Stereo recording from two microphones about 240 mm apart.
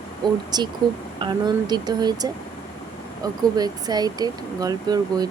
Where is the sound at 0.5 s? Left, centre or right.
Centre.